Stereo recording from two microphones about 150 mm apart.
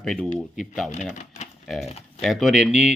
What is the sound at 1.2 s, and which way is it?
Typewriter, 50° left (ahead or behind).